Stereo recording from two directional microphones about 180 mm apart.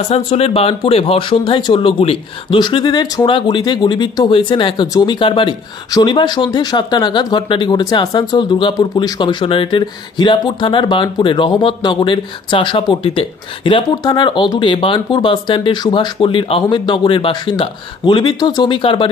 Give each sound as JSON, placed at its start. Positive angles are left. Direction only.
{"t": 0.1, "sound": "speech", "side_deg": 35}